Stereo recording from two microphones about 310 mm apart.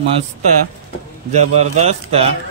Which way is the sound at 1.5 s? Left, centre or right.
Right.